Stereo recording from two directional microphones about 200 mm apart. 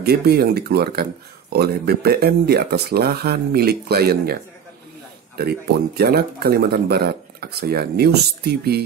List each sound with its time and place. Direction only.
0.0 s speech: 55° right (ahead or behind)
5.4 s speech: 50° right (ahead or behind)